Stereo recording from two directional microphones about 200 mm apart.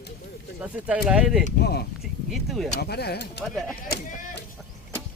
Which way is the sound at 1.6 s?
55° left (ahead or behind).